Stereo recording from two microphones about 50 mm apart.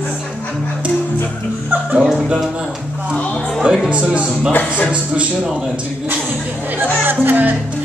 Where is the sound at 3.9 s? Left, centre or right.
Right.